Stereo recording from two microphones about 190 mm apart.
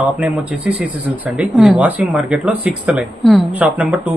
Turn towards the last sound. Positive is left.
turn(degrees=-10)  # may be behind; listen again after turning